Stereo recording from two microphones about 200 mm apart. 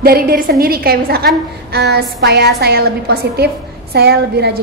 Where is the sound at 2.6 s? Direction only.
50° right (ahead or behind).